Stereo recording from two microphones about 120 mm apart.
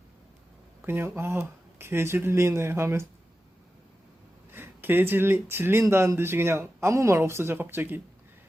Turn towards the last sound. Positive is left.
turn(degrees=-15)  # may be behind; listen again after turning